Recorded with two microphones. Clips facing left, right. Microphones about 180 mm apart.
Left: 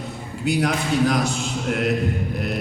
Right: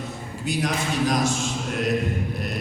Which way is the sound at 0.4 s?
65° left (ahead or behind).